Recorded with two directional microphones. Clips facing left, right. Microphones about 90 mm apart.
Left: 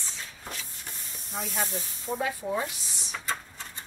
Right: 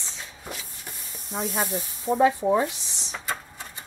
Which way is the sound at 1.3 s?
40° right (ahead or behind).